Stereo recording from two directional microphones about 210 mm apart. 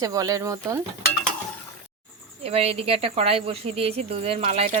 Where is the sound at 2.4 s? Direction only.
30° right (ahead or behind).